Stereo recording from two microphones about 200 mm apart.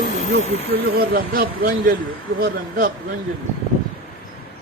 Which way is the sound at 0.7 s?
50° right (ahead or behind).